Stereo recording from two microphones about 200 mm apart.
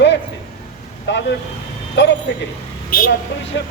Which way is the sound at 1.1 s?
60° left (ahead or behind).